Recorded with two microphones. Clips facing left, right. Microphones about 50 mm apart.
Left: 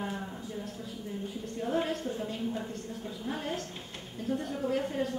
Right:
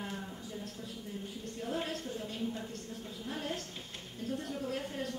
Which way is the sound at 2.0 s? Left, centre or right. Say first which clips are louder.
Left 6 dB; left.